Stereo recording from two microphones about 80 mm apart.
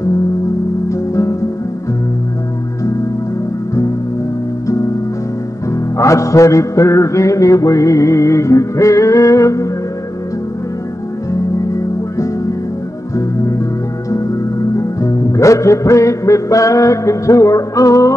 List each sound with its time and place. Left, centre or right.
0.8 s music: left
4.6 s music: left
5.9 s music: left
11.3 s music: left
14.8 s music: left